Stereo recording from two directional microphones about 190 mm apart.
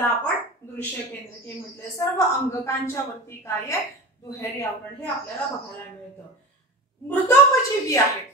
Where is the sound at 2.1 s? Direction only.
15° left (ahead or behind).